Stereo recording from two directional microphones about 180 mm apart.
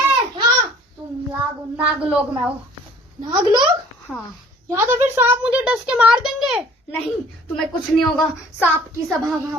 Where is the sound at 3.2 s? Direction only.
25° right (ahead or behind).